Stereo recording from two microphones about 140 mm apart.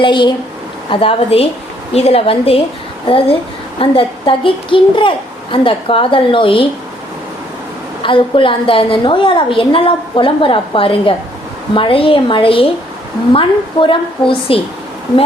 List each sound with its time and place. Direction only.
0.0 s a woman's voice: 35° left (ahead or behind)
8.0 s a woman's voice: 35° left (ahead or behind)